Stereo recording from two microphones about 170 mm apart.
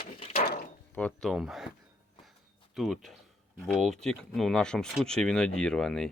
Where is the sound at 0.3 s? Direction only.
65° left (ahead or behind).